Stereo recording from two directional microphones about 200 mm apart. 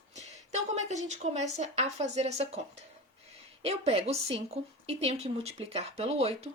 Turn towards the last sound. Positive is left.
turn(degrees=-30)  # may be behind; listen again after turning